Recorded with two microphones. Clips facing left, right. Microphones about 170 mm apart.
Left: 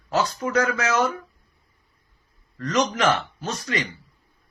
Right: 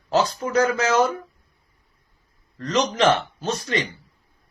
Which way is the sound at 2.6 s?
30° right (ahead or behind).